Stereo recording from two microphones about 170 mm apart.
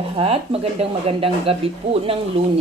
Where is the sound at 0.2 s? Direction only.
35° right (ahead or behind).